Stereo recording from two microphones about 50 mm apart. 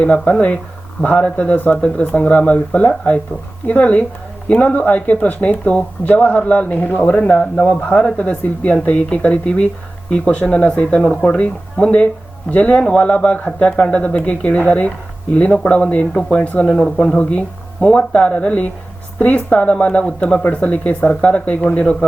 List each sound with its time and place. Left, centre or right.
0.0 s speech: left